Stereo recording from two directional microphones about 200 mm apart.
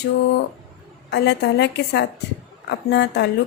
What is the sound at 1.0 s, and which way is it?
A woman's voice, 60° left (ahead or behind).